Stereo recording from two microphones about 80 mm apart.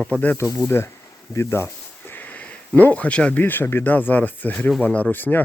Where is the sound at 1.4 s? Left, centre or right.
Left; by 3.4 s centre.